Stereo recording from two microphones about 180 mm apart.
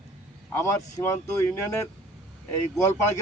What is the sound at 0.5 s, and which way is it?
A man's voice, 15° left (ahead or behind).